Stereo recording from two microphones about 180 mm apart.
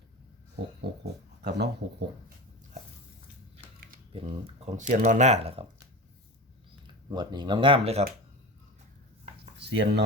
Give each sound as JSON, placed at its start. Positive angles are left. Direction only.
{"t": 1.0, "sound": "speech", "side_deg": -70}
{"t": 4.1, "sound": "speech", "side_deg": -40}
{"t": 7.1, "sound": "speech", "side_deg": -25}
{"t": 9.6, "sound": "speech", "side_deg": -70}